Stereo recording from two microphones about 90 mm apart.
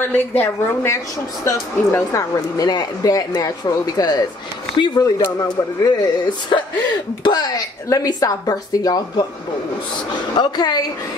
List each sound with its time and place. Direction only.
0.0 s a woman's voice: 20° left (ahead or behind)
1.4 s speech: 35° left (ahead or behind)
10.4 s speech: 50° left (ahead or behind)